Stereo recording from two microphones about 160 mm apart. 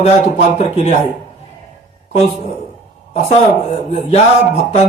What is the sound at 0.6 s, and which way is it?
Speech, 50° left (ahead or behind).